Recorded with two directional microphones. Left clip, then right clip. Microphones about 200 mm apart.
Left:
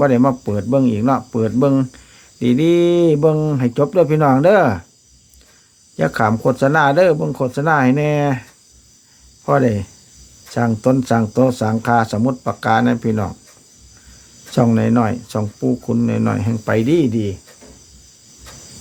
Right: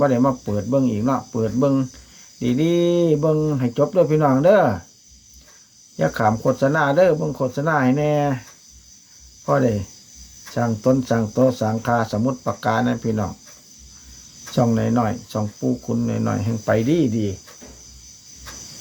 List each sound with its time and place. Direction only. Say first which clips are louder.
0.0 s speech: left 4 dB; 35° left (ahead or behind)
6.0 s speech: left 3 dB; 35° left (ahead or behind)
9.5 s speech: left 3 dB; 30° left (ahead or behind)
14.5 s speech: left 4 dB; 35° left (ahead or behind)